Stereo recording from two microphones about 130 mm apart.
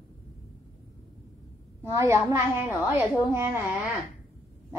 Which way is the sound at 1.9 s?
20° right (ahead or behind).